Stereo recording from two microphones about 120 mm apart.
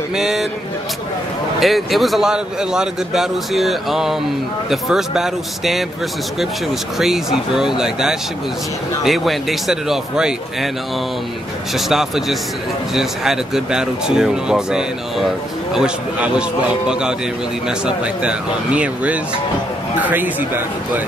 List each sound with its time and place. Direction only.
0.2 s a man's voice: 5° right (ahead or behind)
1.6 s a man's voice: centre (ahead or behind)
7.0 s a man's voice: 5° right (ahead or behind)
11.9 s a man's voice: 5° right (ahead or behind)